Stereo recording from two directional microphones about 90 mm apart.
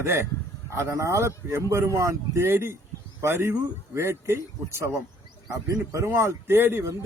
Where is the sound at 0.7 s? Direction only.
30° right (ahead or behind).